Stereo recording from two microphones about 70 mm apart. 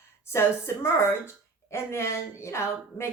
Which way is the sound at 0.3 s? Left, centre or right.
Left.